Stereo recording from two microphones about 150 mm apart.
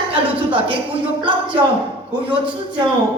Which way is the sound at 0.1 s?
35° right (ahead or behind).